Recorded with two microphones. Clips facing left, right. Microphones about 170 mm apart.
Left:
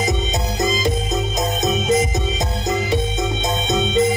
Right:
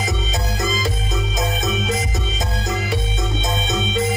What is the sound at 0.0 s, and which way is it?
Music, 20° left (ahead or behind).